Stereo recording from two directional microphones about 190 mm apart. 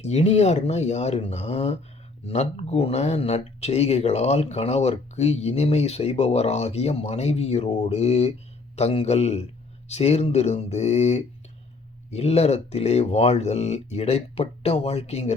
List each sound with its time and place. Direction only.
0.0 s speech: 35° left (ahead or behind)